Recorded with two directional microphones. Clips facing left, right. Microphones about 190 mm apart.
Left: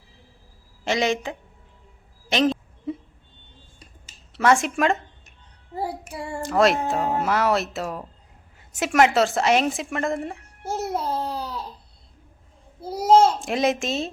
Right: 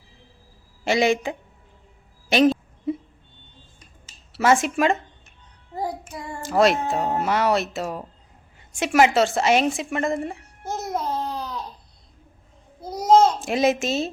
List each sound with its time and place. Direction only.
0.9 s speech: 10° right (ahead or behind)
2.3 s a sound: 10° right (ahead or behind)
4.3 s speech: 5° right (ahead or behind)
5.7 s child singing: 10° left (ahead or behind)
6.4 s a woman's voice: centre (ahead or behind)
9.7 s babbling: centre (ahead or behind)
12.8 s a sound: 5° left (ahead or behind)
13.4 s speech: centre (ahead or behind)